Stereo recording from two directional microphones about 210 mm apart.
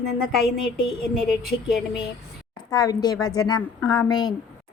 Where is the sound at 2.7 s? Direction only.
20° left (ahead or behind).